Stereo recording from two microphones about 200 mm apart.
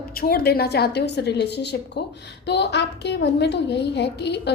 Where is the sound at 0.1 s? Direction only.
50° left (ahead or behind).